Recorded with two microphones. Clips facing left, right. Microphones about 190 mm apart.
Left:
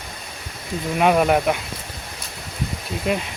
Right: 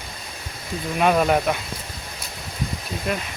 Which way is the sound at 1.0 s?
10° left (ahead or behind).